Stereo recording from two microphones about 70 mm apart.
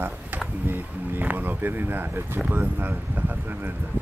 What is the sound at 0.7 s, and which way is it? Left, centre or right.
Speech, right.